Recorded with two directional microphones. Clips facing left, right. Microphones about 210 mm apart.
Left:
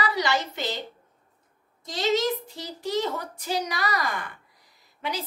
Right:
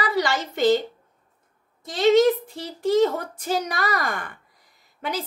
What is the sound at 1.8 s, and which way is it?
A woman's voice, 55° right (ahead or behind).